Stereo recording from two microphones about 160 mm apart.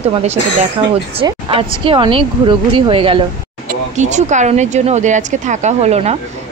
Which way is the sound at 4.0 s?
45° right (ahead or behind).